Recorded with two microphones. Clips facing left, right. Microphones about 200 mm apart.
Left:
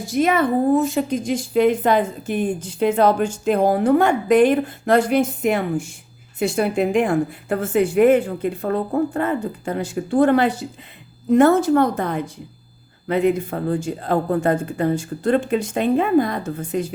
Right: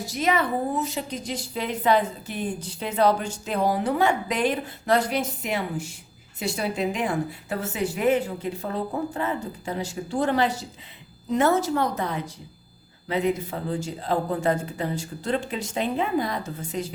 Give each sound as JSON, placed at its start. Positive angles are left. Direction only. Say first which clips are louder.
{"t": 0.0, "sound": "a woman's voice", "louder": "left 6 dB", "side_deg": 50}